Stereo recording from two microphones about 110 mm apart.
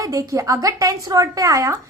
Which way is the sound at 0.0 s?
30° right (ahead or behind).